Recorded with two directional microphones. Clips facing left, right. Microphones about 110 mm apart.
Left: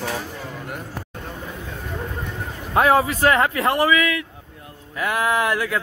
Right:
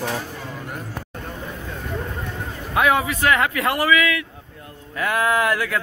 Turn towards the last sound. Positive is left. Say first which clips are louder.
# right 1 dB
turn(degrees=20)  # may be behind; listen again after turning